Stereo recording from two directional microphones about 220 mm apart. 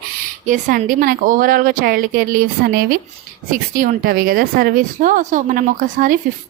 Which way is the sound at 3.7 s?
40° right (ahead or behind).